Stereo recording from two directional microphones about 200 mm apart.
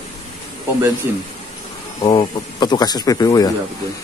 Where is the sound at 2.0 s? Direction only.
20° left (ahead or behind).